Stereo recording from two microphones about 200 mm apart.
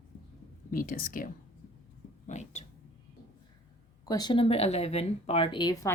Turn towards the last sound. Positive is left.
turn(degrees=20)  # may be behind; listen again after turning